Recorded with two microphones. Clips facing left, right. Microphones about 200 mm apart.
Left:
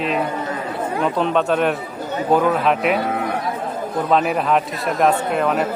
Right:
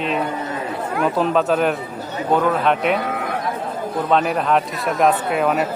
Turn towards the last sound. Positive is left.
turn(degrees=-5)  # may be behind; listen again after turning